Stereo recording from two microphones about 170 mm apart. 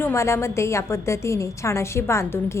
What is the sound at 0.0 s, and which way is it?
A woman's voice, 15° left (ahead or behind).